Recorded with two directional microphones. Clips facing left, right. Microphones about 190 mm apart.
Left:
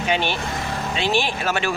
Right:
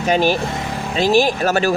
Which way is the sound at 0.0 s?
40° right (ahead or behind).